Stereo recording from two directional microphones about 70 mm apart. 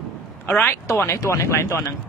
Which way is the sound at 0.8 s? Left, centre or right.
Left.